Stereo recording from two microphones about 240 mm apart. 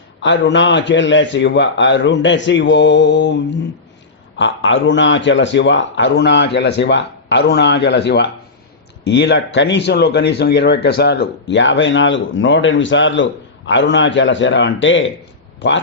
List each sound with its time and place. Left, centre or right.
0.2 s speech: left